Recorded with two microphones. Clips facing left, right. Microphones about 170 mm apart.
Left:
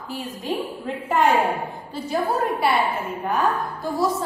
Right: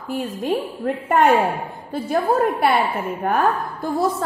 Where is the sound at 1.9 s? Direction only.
55° right (ahead or behind).